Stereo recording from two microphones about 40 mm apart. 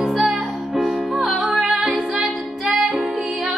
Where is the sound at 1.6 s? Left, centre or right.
Centre.